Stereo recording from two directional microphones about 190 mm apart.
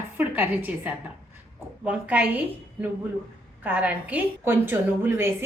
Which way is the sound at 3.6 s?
10° right (ahead or behind).